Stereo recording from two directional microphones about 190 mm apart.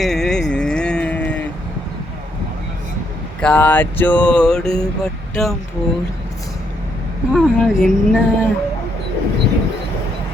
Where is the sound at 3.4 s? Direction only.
5° left (ahead or behind).